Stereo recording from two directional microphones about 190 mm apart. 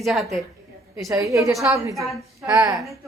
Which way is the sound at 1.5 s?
15° right (ahead or behind).